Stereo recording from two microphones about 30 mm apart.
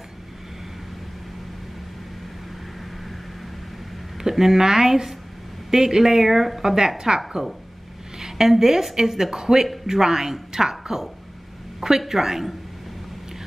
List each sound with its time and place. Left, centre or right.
4.2 s a woman's voice: centre